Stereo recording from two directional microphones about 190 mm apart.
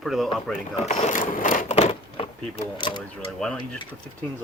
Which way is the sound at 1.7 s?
30° left (ahead or behind).